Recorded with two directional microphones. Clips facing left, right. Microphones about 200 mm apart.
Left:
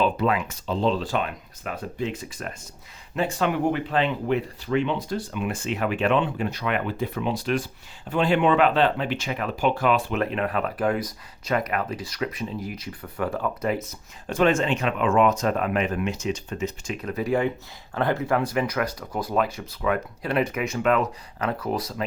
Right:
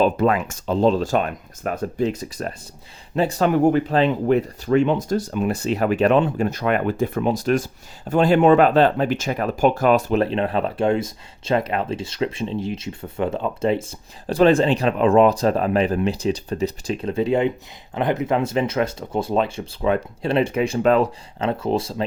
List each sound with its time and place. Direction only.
0.0 s speech: 45° right (ahead or behind); by 22.0 s 25° right (ahead or behind)